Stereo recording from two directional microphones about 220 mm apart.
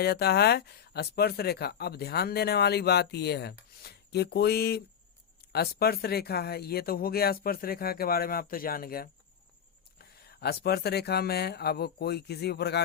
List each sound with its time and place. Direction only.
0.0 s speech: 45° left (ahead or behind)